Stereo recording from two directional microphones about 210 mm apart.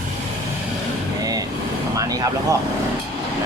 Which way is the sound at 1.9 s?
15° right (ahead or behind).